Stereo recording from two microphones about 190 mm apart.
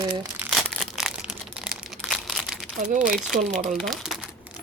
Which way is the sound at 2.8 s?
45° right (ahead or behind).